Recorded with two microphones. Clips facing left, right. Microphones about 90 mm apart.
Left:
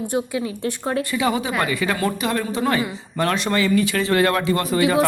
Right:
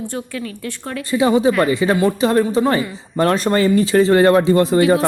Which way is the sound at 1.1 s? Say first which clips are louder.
Right 11 dB; 25° right (ahead or behind).